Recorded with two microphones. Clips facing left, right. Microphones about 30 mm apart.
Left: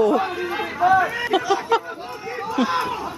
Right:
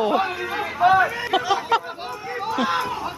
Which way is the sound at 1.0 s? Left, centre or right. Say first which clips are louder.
Left 2 dB; centre.